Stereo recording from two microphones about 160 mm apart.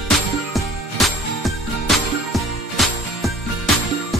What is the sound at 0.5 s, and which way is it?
Music, centre (ahead or behind).